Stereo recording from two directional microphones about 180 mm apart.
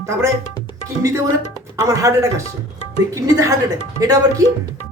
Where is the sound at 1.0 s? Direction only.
20° right (ahead or behind).